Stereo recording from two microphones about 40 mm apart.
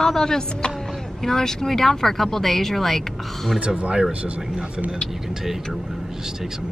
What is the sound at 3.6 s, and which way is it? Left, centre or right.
Speech, right.